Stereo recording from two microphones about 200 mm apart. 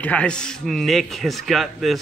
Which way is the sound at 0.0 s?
5° left (ahead or behind).